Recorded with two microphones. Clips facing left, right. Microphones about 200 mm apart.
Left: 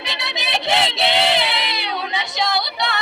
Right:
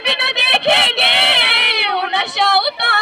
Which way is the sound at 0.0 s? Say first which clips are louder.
Right 6 dB; 65° right (ahead or behind).